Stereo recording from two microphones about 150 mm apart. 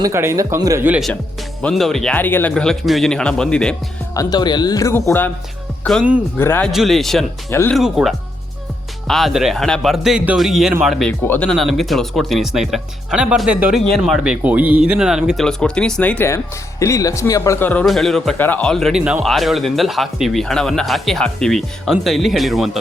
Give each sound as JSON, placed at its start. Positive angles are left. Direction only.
{"t": 0.0, "sound": "speech", "side_deg": -20}
{"t": 0.9, "sound": "speech", "side_deg": -5}
{"t": 4.1, "sound": "speech", "side_deg": 25}
{"t": 5.8, "sound": "speech", "side_deg": 0}
{"t": 6.3, "sound": "a man's voice", "side_deg": 15}
{"t": 6.7, "sound": "speech", "side_deg": 0}
{"t": 17.8, "sound": "speech", "side_deg": 0}
{"t": 18.3, "sound": "speech", "side_deg": 10}